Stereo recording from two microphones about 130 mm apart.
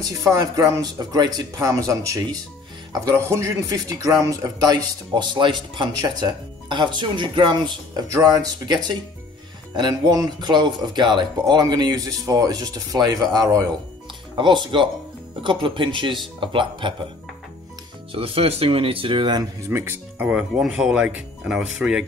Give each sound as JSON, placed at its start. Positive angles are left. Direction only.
{"t": 0.2, "sound": "a man's voice", "side_deg": -25}
{"t": 18.1, "sound": "speech", "side_deg": -45}
{"t": 19.6, "sound": "speech", "side_deg": -20}